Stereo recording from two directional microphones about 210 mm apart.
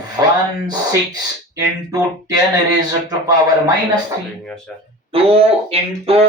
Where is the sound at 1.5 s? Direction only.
20° right (ahead or behind).